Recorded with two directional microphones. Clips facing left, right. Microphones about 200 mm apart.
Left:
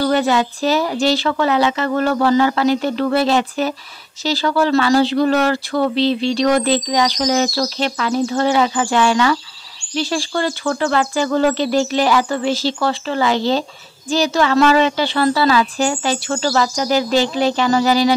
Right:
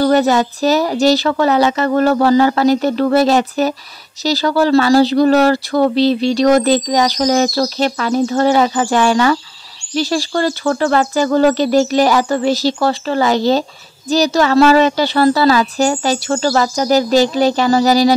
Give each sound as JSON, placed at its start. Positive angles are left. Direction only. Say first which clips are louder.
{"t": 0.0, "sound": "speech", "louder": "right 4 dB", "side_deg": -40}